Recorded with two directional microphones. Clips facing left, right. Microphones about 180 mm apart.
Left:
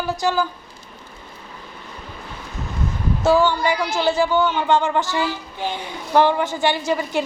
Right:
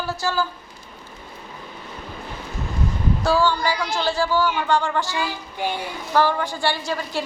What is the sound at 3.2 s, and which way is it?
Speech, 20° left (ahead or behind).